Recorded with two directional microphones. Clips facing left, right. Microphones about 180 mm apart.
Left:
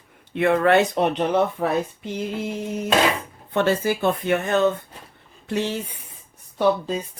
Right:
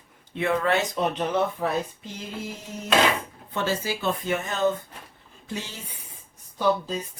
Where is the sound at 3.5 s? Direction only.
60° left (ahead or behind).